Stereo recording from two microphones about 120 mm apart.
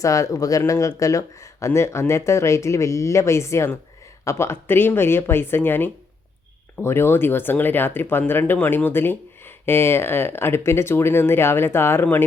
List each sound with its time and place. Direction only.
0.0 s speech: 25° left (ahead or behind)